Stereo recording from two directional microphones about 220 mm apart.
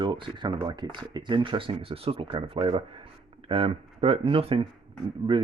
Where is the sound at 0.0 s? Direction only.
20° right (ahead or behind).